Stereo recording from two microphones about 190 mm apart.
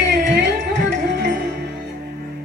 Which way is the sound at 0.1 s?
65° right (ahead or behind).